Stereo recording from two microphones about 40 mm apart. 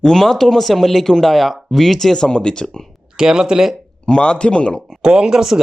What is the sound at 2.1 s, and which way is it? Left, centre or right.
Speech, centre.